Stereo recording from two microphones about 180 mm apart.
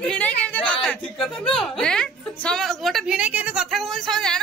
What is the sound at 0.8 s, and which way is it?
A woman's voice, centre (ahead or behind).